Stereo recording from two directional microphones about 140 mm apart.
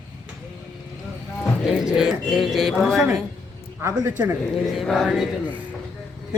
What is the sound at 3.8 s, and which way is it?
Speech, 15° right (ahead or behind).